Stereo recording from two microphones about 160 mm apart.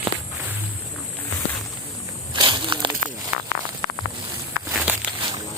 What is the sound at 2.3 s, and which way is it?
Slosh, 30° right (ahead or behind).